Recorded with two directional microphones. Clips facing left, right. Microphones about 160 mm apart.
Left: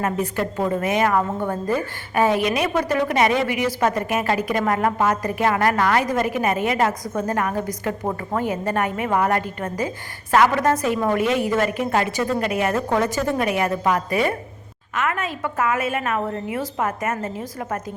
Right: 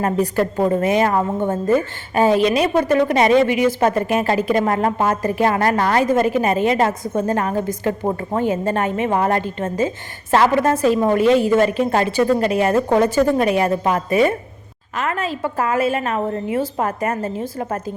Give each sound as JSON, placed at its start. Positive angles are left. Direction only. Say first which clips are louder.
{"t": 0.0, "sound": "a woman's voice", "louder": "right 5 dB", "side_deg": -35}